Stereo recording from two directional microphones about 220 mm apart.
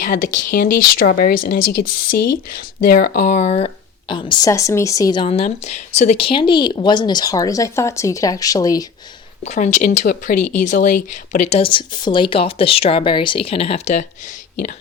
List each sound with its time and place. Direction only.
0.0 s a woman's voice: 35° left (ahead or behind); by 5.2 s 15° left (ahead or behind)
5.2 s a woman's voice: 30° left (ahead or behind)
9.4 s a woman's voice: 35° left (ahead or behind)